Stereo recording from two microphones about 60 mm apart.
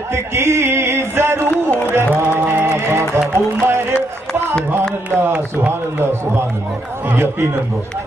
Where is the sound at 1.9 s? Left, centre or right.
Right.